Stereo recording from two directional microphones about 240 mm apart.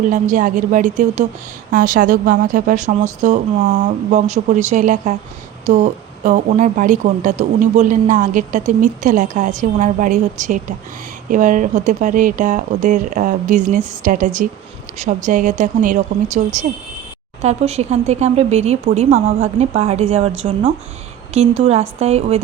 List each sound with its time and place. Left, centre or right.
0.1 s speech: right
17.4 s speech: right